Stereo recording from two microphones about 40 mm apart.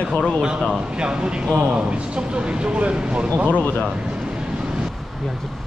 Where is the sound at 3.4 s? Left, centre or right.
Left.